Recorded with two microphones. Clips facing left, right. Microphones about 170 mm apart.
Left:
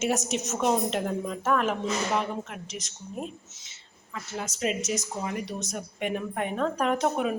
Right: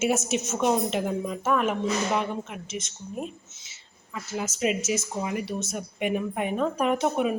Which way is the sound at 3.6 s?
5° right (ahead or behind).